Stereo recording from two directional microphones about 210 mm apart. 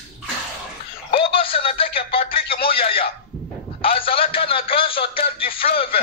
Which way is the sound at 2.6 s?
25° left (ahead or behind).